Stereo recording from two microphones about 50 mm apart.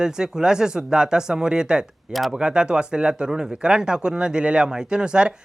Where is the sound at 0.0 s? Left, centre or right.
Centre.